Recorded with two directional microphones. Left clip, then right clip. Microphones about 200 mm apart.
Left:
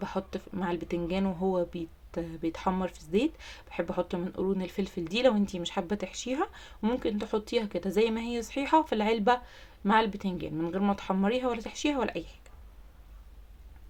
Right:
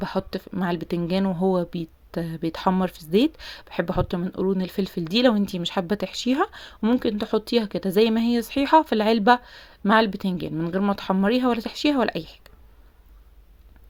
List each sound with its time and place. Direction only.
0.0 s speech: 40° right (ahead or behind)